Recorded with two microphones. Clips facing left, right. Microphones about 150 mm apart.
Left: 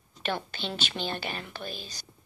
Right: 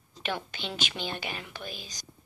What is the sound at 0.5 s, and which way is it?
Speech, 10° right (ahead or behind).